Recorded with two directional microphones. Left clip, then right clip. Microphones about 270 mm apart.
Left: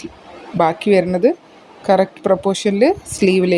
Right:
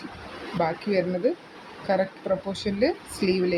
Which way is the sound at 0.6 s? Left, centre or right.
Left.